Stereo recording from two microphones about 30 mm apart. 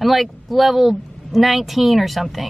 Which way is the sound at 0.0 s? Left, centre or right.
Centre.